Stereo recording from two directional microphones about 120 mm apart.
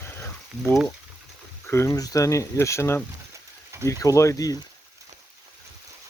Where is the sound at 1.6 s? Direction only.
20° left (ahead or behind).